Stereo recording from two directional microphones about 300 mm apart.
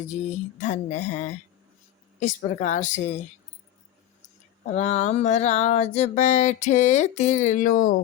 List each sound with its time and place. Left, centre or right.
0.0 s music: left
4.7 s music: left